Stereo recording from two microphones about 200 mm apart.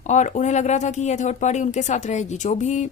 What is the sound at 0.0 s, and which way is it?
Speech, 35° left (ahead or behind).